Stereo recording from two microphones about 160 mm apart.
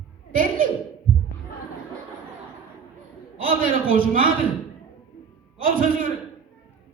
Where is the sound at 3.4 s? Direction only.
60° right (ahead or behind).